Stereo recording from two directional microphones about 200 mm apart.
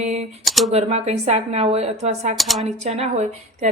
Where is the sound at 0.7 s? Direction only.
30° right (ahead or behind).